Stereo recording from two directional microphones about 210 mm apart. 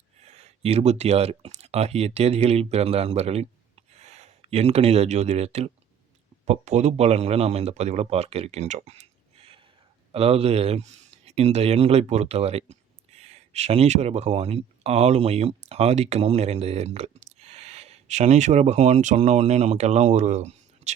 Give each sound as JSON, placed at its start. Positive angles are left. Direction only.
{"t": 0.3, "sound": "speech", "side_deg": -30}